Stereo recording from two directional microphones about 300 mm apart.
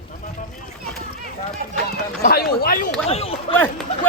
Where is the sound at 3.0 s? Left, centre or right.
Centre.